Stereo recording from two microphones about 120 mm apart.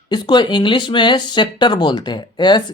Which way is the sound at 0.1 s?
40° left (ahead or behind).